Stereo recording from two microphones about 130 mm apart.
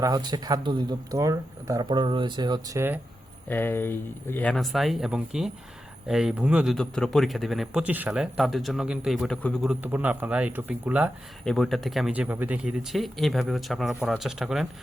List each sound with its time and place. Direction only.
0.0 s speech: 30° right (ahead or behind)
1.8 s speech: 35° right (ahead or behind); by 3.0 s 20° right (ahead or behind)
3.5 s speech: 15° left (ahead or behind)
4.5 s speech: centre (ahead or behind)
6.7 s speech: 5° left (ahead or behind)
9.2 s speech: 5° left (ahead or behind)
9.6 s speech: 10° right (ahead or behind)
11.4 s speech: centre (ahead or behind)
12.1 s speech: 10° right (ahead or behind)